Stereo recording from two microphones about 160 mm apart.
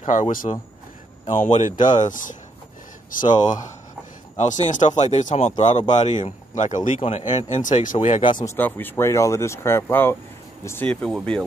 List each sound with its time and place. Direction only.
0.0 s speech: 50° left (ahead or behind)
3.3 s speech: 25° left (ahead or behind)
4.4 s speech: 50° left (ahead or behind)
7.0 s speech: 40° left (ahead or behind)
7.5 s speech: 55° left (ahead or behind)
8.2 s speech: 30° left (ahead or behind)
8.5 s speech: 10° left (ahead or behind)
10.9 s speech: 5° left (ahead or behind)